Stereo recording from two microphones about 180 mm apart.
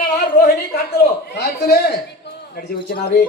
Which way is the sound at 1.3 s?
65° left (ahead or behind).